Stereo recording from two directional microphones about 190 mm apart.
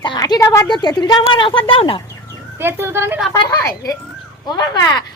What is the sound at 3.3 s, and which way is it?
A woman's voice, 20° left (ahead or behind).